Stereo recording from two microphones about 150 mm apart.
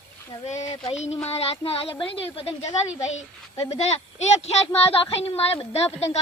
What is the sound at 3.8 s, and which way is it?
Speech, 45° left (ahead or behind).